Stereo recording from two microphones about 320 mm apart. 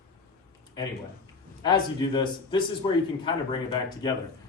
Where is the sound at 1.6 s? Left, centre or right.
Centre.